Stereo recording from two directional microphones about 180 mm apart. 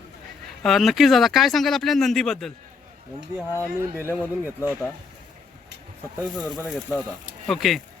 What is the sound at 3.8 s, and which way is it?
Speech, 15° right (ahead or behind).